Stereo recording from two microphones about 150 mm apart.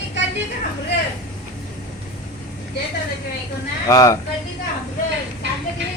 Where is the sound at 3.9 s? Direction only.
20° left (ahead or behind).